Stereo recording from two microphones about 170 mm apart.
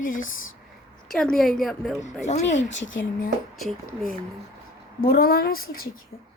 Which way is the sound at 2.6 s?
90° left.